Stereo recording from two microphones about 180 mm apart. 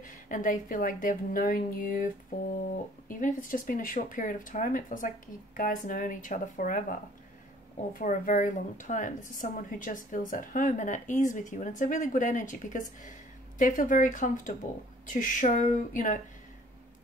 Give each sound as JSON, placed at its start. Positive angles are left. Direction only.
{"t": 0.0, "sound": "a woman's voice", "side_deg": 45}
{"t": 3.1, "sound": "a woman's voice", "side_deg": 45}